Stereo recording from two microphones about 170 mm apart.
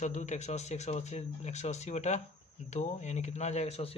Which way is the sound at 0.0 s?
45° left (ahead or behind).